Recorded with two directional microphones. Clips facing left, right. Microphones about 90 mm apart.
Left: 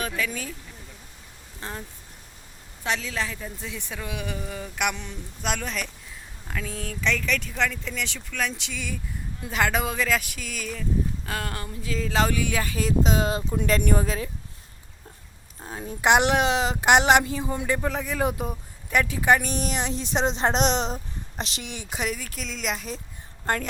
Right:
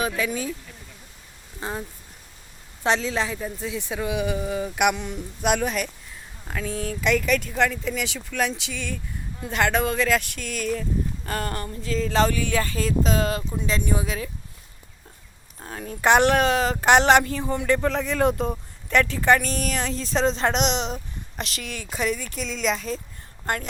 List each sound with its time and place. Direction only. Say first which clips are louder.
0.2 s a woman's voice: right 4 dB; 20° right (ahead or behind)
1.6 s speech: right 5 dB; 10° right (ahead or behind)
2.8 s a woman's voice: right 5 dB; 30° right (ahead or behind); by 13.6 s 20° left (ahead or behind)
13.6 s speech: left 5 dB; 55° left (ahead or behind)
15.6 s speech: right 1 dB; 15° left (ahead or behind)
20.6 s speech: left 1 dB; 40° left (ahead or behind)
20.9 s speech: right 1 dB; 25° left (ahead or behind)
22.4 s speech: right 5 dB; centre (ahead or behind)